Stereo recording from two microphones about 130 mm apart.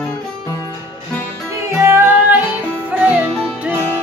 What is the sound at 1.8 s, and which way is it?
Music, 15° right (ahead or behind).